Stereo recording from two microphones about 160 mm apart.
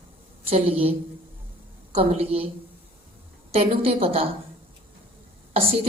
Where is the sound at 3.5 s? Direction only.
35° right (ahead or behind).